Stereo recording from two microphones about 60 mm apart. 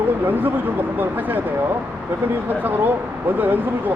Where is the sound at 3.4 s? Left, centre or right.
Right.